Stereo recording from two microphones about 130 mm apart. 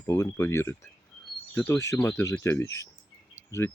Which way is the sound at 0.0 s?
20° left (ahead or behind).